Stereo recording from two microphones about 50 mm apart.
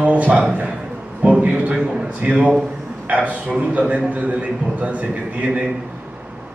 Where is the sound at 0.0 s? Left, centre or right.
Right.